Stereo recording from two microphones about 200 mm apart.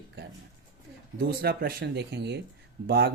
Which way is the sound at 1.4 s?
50° right (ahead or behind).